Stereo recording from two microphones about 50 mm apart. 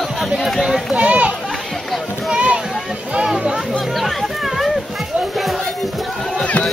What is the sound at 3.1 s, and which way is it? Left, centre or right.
Music, centre.